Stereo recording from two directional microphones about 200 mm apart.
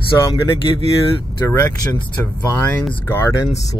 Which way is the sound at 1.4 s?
15° left (ahead or behind).